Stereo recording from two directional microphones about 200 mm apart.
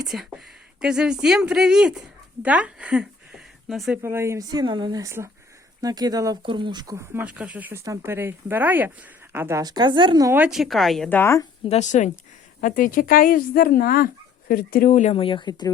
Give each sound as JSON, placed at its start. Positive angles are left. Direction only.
{"t": 0.1, "sound": "speech", "side_deg": 0}
{"t": 4.0, "sound": "speech", "side_deg": -15}
{"t": 10.3, "sound": "speech", "side_deg": -5}
{"t": 11.6, "sound": "a woman's voice", "side_deg": 35}